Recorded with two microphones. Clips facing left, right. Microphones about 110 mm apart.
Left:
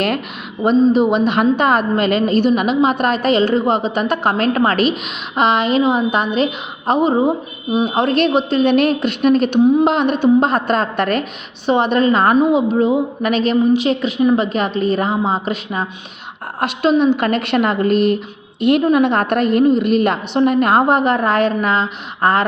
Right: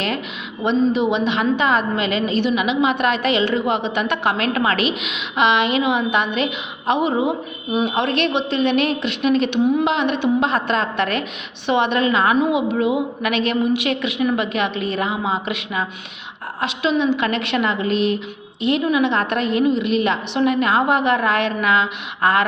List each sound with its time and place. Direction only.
0.6 s a woman's voice: 45° left (ahead or behind)
16.6 s a woman's voice: 50° left (ahead or behind)